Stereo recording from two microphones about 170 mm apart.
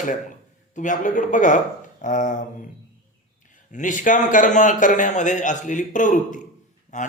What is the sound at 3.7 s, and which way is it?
A man's voice, 50° left (ahead or behind).